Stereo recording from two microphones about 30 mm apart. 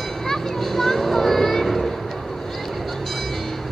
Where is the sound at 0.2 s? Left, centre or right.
Centre.